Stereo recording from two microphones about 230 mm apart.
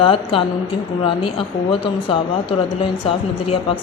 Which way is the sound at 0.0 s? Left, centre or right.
Left.